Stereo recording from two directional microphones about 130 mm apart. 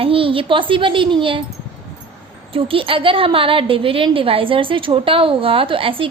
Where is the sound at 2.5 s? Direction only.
45° right (ahead or behind).